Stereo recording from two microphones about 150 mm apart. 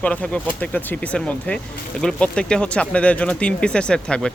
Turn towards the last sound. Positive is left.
turn(degrees=5)  # may be behind; listen again after turning